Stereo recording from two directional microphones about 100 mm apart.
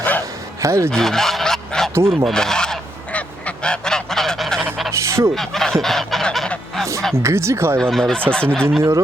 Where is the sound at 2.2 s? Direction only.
5° left (ahead or behind).